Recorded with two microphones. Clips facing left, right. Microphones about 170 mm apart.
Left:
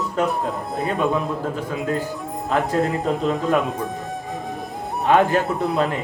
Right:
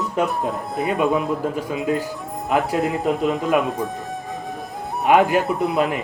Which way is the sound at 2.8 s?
Centre (ahead or behind).